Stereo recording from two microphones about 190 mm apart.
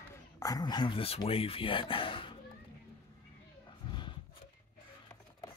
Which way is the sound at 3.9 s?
25° left (ahead or behind).